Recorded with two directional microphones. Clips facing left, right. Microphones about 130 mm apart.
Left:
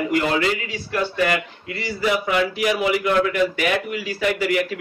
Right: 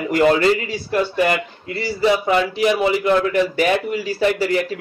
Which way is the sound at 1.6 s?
35° right (ahead or behind).